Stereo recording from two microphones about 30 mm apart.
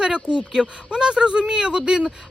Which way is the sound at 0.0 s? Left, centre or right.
Right.